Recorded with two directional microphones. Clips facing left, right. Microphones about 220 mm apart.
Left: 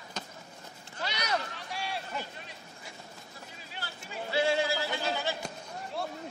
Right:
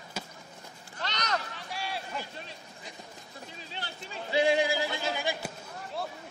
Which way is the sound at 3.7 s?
20° right (ahead or behind).